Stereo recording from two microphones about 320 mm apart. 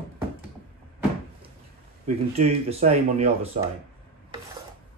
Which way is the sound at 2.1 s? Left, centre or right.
Centre.